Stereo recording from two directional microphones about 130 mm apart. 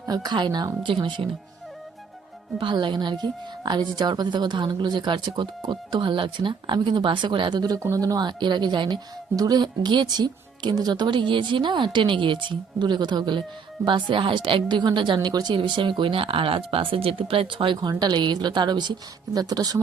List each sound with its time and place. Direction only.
0.0 s a woman's voice: 30° right (ahead or behind)
2.6 s a woman's voice: 40° right (ahead or behind)